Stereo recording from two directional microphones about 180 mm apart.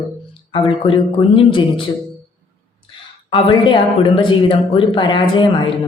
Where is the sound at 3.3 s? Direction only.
25° left (ahead or behind).